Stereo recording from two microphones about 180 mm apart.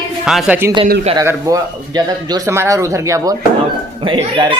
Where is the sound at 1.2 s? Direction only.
20° right (ahead or behind).